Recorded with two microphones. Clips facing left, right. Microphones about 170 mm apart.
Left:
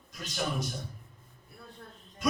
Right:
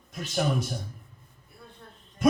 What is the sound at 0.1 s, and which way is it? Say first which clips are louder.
Speech: right 6 dB; 50° right (ahead or behind).